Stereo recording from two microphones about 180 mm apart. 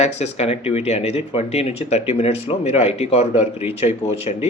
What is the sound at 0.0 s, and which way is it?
Speech, 35° left (ahead or behind).